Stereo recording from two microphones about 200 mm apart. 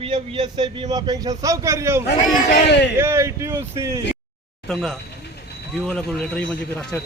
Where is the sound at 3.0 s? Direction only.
15° right (ahead or behind).